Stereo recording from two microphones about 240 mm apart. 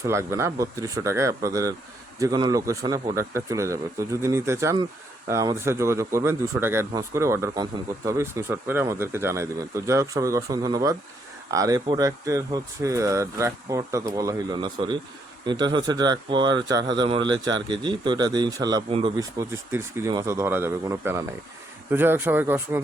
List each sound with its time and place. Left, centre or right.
0.0 s speech: centre